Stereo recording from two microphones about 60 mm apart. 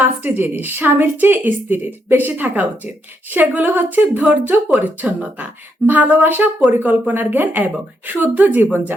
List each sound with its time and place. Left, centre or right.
0.0 s a woman's voice: right